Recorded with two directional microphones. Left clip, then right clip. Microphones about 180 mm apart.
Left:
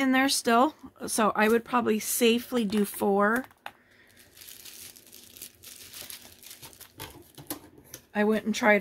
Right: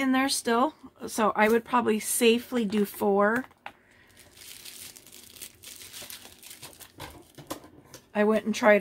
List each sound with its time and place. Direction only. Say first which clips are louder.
0.0 s speech: left 2 dB; 25° left (ahead or behind)
8.1 s speech: right 2 dB; 20° left (ahead or behind)